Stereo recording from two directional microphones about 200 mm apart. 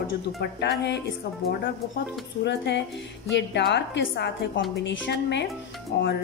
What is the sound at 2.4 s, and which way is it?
A woman's voice, 60° left (ahead or behind).